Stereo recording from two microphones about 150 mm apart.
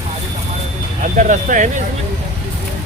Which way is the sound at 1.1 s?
60° right (ahead or behind).